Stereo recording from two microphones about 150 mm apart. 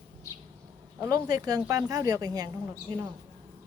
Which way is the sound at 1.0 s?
25° right (ahead or behind).